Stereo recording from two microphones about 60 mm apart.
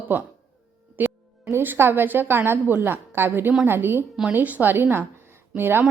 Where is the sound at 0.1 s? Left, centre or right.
Right.